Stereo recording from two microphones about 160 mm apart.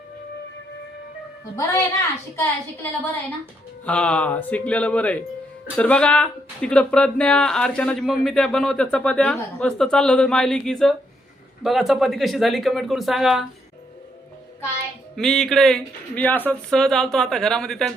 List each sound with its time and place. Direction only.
1.5 s speech: 15° left (ahead or behind)
3.8 s speech: 10° left (ahead or behind)
15.1 s speech: centre (ahead or behind)